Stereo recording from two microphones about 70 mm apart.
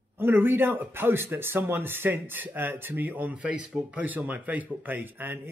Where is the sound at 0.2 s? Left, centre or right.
Right.